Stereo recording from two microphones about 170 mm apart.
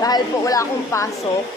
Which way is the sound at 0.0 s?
20° left (ahead or behind).